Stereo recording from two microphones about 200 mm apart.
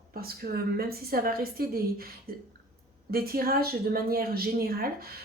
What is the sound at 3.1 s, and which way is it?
Speech, 50° right (ahead or behind).